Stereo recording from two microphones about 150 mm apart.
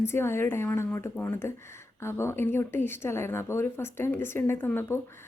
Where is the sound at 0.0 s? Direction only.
15° left (ahead or behind).